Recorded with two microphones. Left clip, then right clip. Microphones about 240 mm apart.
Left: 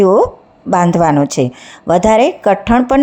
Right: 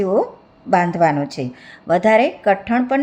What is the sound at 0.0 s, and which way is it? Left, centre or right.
Speech, left.